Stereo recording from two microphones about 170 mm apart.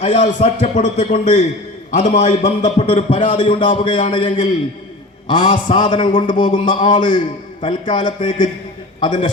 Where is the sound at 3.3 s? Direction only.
30° left (ahead or behind).